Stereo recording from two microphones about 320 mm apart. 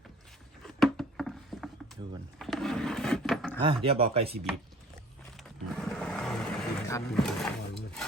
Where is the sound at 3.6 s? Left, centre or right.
Centre.